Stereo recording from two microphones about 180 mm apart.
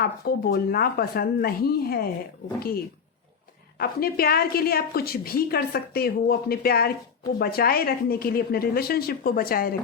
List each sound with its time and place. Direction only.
0.0 s a woman's voice: 60° left (ahead or behind)
3.8 s a woman's voice: 55° left (ahead or behind)